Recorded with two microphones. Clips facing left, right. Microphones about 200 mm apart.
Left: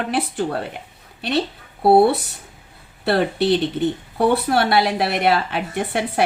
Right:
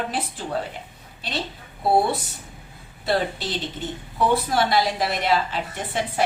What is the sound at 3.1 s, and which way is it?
Speech, 65° left (ahead or behind).